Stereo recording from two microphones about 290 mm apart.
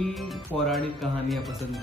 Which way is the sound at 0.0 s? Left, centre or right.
Centre.